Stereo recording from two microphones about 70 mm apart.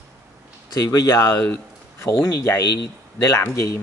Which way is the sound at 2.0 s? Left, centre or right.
Left.